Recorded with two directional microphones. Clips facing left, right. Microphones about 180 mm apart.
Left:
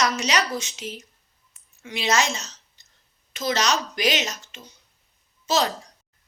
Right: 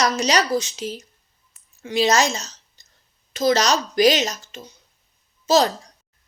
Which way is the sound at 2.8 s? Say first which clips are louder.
Right 3 dB; 35° right (ahead or behind).